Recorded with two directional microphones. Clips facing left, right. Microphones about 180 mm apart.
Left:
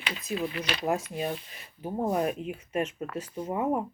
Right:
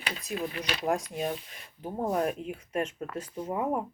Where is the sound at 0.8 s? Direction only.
Centre (ahead or behind).